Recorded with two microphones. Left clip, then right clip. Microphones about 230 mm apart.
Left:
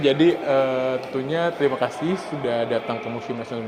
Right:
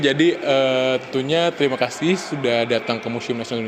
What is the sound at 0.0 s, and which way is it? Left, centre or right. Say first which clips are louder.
Speech: right 1 dB; right.